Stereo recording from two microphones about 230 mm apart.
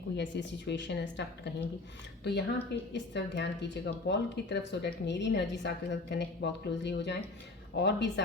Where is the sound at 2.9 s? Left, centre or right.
Left.